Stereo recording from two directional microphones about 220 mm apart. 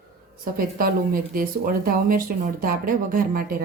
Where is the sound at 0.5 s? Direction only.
40° right (ahead or behind).